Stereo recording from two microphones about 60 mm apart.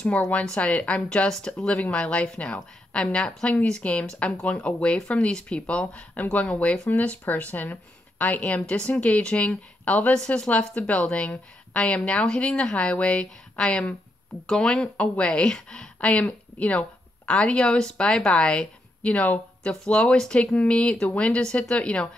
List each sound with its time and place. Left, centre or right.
0.0 s a woman's voice: left